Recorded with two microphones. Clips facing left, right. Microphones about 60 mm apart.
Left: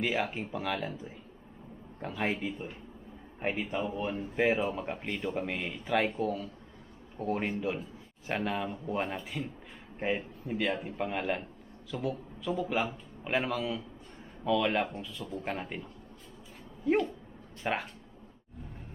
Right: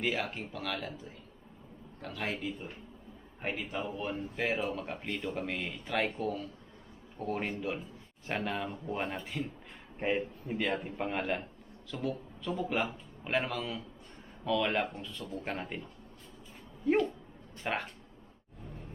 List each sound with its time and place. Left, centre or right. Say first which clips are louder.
0.0 s speech: left 2 dB; centre
6.1 s a man's voice: left 3 dB; centre